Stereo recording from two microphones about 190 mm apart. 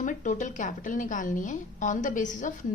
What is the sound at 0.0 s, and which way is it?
A woman's voice, 40° left (ahead or behind).